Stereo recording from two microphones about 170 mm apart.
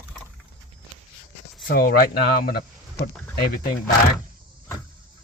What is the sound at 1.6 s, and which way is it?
Speech, 65° left (ahead or behind).